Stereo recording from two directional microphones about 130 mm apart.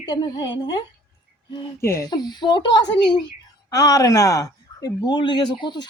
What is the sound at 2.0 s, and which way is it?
Speech, 35° left (ahead or behind).